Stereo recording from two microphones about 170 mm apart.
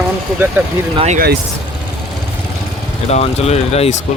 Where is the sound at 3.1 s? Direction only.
40° left (ahead or behind).